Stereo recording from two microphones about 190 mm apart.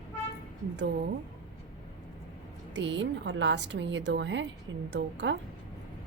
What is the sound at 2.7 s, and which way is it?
A woman's voice, 70° right (ahead or behind).